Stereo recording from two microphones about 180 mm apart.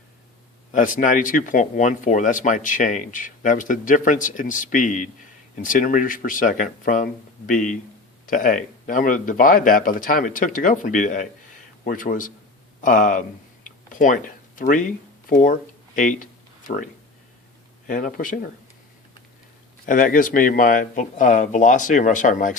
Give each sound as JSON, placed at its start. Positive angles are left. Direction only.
{"t": 0.7, "sound": "speech", "side_deg": 45}
{"t": 13.7, "sound": "a sound", "side_deg": 45}
{"t": 16.0, "sound": "speech", "side_deg": 45}
{"t": 17.8, "sound": "speech", "side_deg": 45}
{"t": 19.8, "sound": "speech", "side_deg": 45}